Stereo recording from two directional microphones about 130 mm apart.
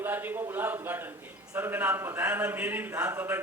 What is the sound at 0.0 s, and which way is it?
A man's voice, 15° right (ahead or behind).